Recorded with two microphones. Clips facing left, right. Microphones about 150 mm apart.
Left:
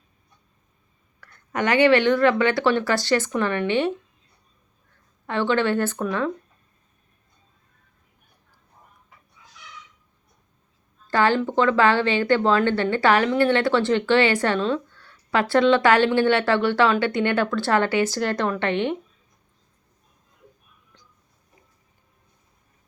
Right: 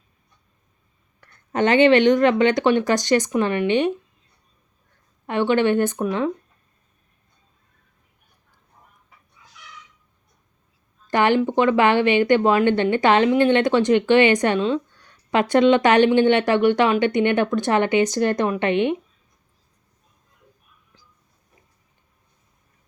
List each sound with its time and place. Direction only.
1.2 s speech: 25° right (ahead or behind)
5.2 s speech: 15° right (ahead or behind)
11.1 s speech: 20° right (ahead or behind)